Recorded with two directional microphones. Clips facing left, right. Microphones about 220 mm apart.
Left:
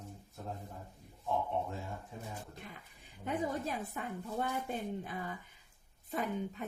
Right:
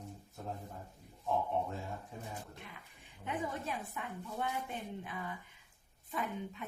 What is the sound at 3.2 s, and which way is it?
A woman's voice, 40° left (ahead or behind).